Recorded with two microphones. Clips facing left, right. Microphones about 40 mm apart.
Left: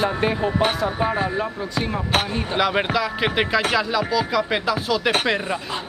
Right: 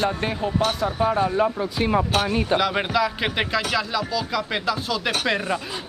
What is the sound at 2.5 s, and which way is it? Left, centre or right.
Music, centre.